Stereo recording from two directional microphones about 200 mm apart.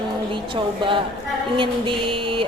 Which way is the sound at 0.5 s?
25° right (ahead or behind).